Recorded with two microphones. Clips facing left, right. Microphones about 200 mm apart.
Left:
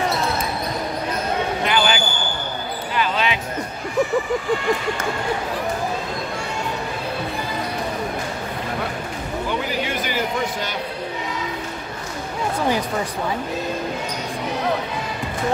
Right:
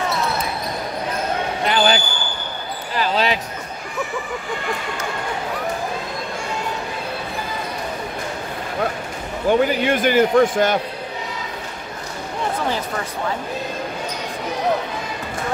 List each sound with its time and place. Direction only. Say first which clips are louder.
1.7 s a sound: right 4 dB; 40° right (ahead or behind)
2.9 s basketball bounce: right 2 dB; 35° right (ahead or behind)
9.5 s a man's voice: right 10 dB; 50° right (ahead or behind)